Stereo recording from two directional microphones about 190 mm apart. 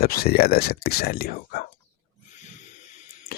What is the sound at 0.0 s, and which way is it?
Speech, 50° left (ahead or behind).